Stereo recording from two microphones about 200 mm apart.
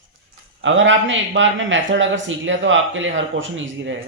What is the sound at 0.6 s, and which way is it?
Speech, 70° right (ahead or behind).